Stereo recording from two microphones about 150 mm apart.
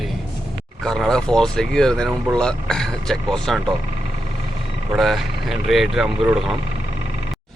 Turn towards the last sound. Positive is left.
turn(degrees=-5)  # may be behind; listen again after turning